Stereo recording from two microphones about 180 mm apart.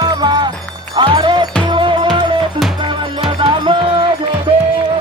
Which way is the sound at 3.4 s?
25° right (ahead or behind).